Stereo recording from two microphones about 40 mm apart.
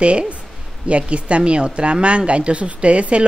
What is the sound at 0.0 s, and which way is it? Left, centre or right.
Speech, right.